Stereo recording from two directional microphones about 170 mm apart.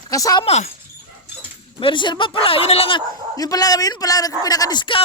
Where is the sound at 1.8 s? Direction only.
30° left (ahead or behind).